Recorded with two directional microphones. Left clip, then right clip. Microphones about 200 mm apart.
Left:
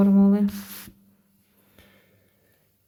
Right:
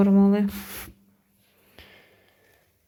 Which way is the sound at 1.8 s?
25° right (ahead or behind).